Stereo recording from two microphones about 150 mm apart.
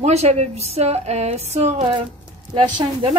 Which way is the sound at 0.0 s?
45° right (ahead or behind).